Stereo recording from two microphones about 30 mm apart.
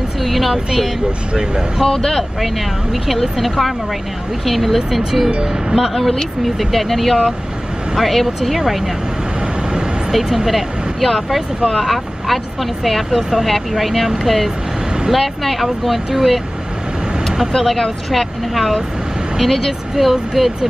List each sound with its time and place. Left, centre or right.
0.2 s a sound: centre
1.9 s speech: centre
2.9 s speech: centre
5.3 s speech: right
5.8 s speech: centre
8.4 s speech: centre
10.1 s speech: centre
17.6 s speech: centre
18.5 s speech: centre